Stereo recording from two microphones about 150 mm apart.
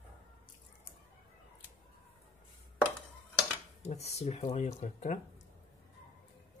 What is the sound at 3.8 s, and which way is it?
Speech, 45° left (ahead or behind).